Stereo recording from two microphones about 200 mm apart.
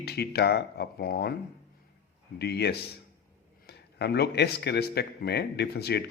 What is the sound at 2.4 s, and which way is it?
Speech, 55° left (ahead or behind).